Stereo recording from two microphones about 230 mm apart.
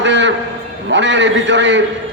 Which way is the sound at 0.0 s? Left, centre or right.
Right.